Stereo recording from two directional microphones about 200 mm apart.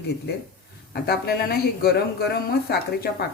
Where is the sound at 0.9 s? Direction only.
50° left (ahead or behind).